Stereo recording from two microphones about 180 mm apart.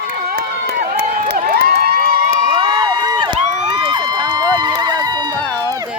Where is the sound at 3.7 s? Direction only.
20° right (ahead or behind).